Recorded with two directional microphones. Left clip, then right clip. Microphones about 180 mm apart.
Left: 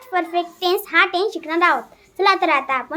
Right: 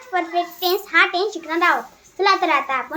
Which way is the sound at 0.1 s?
55° left (ahead or behind).